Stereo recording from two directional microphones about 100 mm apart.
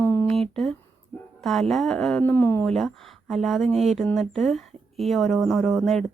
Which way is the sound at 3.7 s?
90° right.